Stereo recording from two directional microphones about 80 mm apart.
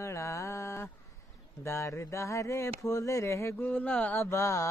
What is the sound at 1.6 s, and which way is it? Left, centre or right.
Speech, left.